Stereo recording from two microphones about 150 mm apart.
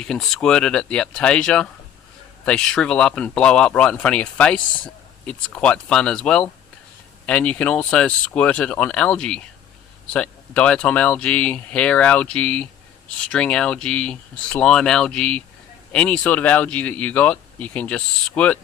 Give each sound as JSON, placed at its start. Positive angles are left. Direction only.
{"t": 0.0, "sound": "speech", "side_deg": 5}